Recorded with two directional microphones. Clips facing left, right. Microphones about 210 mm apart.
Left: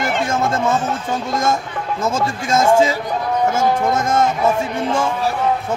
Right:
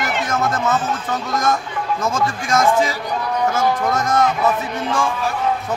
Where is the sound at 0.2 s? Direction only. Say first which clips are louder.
Even; 25° left (ahead or behind).